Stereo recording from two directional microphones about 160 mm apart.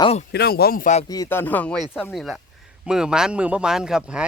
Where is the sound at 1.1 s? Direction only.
20° left (ahead or behind).